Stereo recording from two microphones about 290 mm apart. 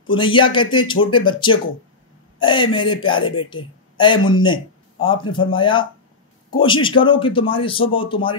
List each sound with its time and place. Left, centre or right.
0.2 s speech: centre